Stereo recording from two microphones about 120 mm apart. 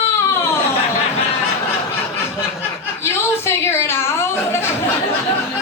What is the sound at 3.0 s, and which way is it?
Chuckle, 20° left (ahead or behind).